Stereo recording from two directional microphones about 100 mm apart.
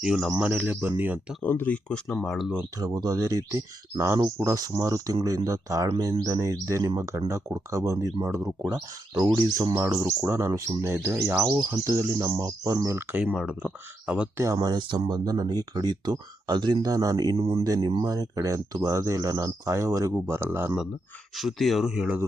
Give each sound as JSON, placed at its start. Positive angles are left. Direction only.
{"t": 0.0, "sound": "speech", "side_deg": -10}
{"t": 0.5, "sound": "speech", "side_deg": -20}
{"t": 1.5, "sound": "speech", "side_deg": 20}
{"t": 2.0, "sound": "speech", "side_deg": 5}
{"t": 2.7, "sound": "speech", "side_deg": -40}
{"t": 9.7, "sound": "speech", "side_deg": -25}
{"t": 13.0, "sound": "speech", "side_deg": -20}
{"t": 13.3, "sound": "speech", "side_deg": -5}
{"t": 14.3, "sound": "speech", "side_deg": -35}
{"t": 14.8, "sound": "speech", "side_deg": -50}
{"t": 16.8, "sound": "speech", "side_deg": -35}
{"t": 17.3, "sound": "speech", "side_deg": -75}
{"t": 18.0, "sound": "speech", "side_deg": -35}
{"t": 21.3, "sound": "speech", "side_deg": 0}